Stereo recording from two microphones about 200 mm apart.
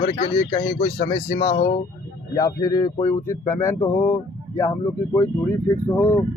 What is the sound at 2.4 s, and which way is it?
Speech, 15° left (ahead or behind).